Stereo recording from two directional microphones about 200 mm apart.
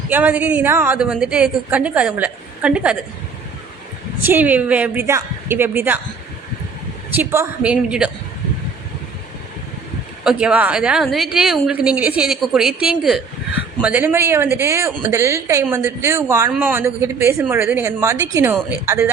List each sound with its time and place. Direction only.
0.1 s a woman's voice: 10° right (ahead or behind)
4.2 s a woman's voice: 10° right (ahead or behind)
7.2 s a woman's voice: 10° right (ahead or behind)
10.2 s a woman's voice: 5° right (ahead or behind)